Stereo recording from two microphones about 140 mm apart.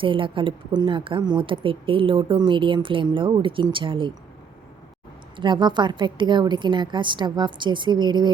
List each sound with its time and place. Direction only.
0.0 s a woman's voice: 40° right (ahead or behind)
5.4 s a woman's voice: 35° right (ahead or behind)